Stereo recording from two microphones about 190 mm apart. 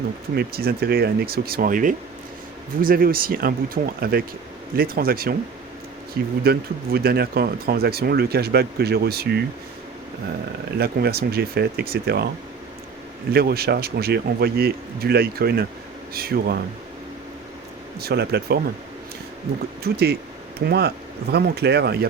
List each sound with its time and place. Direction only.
0.3 s speech: 55° right (ahead or behind)
3.8 s speech: 35° right (ahead or behind)
4.8 s speech: 50° right (ahead or behind)
6.4 s speech: 55° right (ahead or behind)
10.8 s speech: 55° right (ahead or behind)
13.3 s speech: 55° right (ahead or behind)
18.0 s speech: 60° right (ahead or behind)
19.8 s speech: 60° right (ahead or behind)